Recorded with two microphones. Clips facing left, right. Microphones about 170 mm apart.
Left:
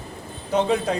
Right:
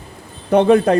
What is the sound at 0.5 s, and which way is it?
Speech, 60° right (ahead or behind).